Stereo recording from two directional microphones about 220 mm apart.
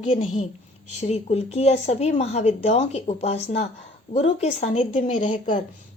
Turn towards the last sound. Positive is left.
turn(degrees=35)  # may be behind; listen again after turning